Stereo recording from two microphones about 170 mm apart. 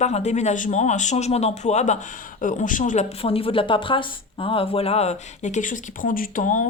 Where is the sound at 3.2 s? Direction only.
35° left (ahead or behind).